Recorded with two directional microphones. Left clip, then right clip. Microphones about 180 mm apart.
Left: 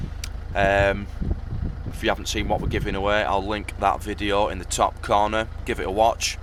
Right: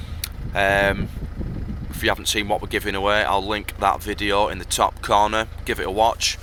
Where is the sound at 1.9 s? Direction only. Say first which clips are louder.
Right 3 dB; centre (ahead or behind).